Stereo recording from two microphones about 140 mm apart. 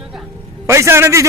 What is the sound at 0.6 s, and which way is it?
Speech, 20° right (ahead or behind).